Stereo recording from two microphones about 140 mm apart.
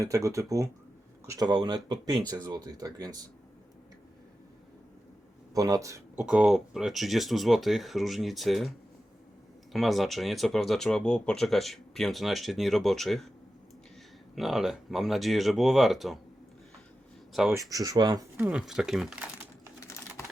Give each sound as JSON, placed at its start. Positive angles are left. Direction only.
{"t": 0.0, "sound": "speech", "side_deg": -20}
{"t": 5.5, "sound": "speech", "side_deg": -25}
{"t": 6.1, "sound": "speech", "side_deg": -5}
{"t": 9.7, "sound": "speech", "side_deg": 0}
{"t": 14.3, "sound": "speech", "side_deg": 0}
{"t": 17.5, "sound": "speech", "side_deg": -25}
{"t": 18.3, "sound": "speech", "side_deg": -10}